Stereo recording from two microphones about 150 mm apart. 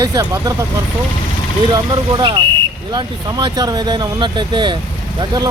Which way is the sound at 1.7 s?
30° right (ahead or behind).